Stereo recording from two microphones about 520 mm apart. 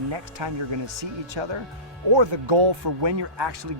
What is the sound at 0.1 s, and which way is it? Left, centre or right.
Speech, right.